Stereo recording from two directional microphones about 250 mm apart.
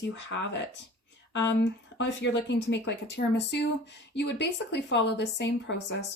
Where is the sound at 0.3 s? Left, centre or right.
Left.